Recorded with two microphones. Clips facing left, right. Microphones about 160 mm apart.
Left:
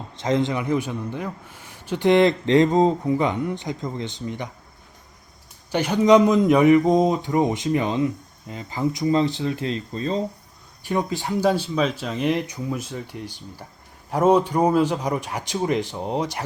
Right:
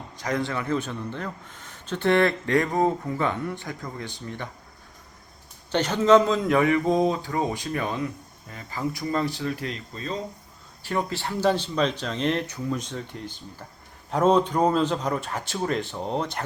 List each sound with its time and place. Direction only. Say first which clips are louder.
0.2 s a man's voice: left 5 dB; 20° left (ahead or behind)
5.7 s speech: left 2 dB; 10° left (ahead or behind); by 10.2 s 30° left (ahead or behind)
10.8 s a man's voice: left 3 dB; 15° left (ahead or behind)